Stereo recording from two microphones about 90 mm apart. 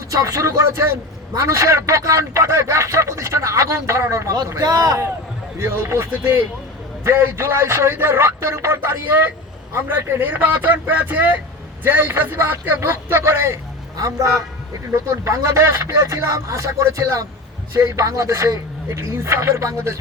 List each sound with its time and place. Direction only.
0.1 s a man's voice: 35° right (ahead or behind)
5.5 s a man's voice: 30° right (ahead or behind)